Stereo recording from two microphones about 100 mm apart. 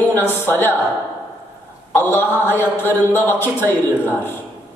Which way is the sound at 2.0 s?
20° left (ahead or behind).